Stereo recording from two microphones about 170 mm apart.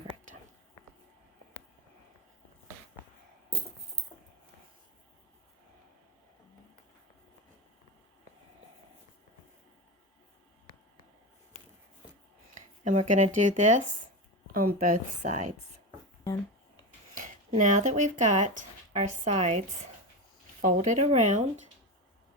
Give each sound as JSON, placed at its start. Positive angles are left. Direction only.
{"t": 12.8, "sound": "speech", "side_deg": -45}
{"t": 17.6, "sound": "speech", "side_deg": -45}